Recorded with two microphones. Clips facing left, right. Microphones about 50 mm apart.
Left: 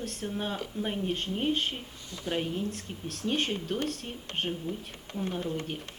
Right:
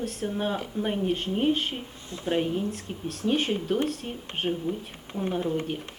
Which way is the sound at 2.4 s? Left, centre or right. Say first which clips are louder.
Right 4 dB; centre.